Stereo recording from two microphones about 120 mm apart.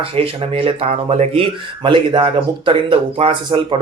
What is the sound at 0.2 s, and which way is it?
Speech, 50° right (ahead or behind).